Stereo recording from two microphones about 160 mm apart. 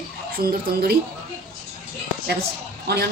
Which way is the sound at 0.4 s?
75° right (ahead or behind).